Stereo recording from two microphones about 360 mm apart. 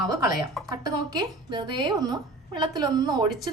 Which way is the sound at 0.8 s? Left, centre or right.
Centre.